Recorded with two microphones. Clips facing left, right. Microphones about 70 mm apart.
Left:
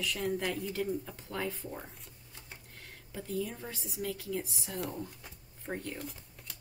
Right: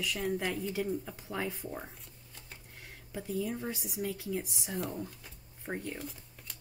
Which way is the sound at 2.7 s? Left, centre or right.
Centre.